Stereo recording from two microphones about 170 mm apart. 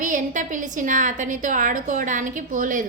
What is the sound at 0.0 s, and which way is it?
A woman's voice, 50° right (ahead or behind).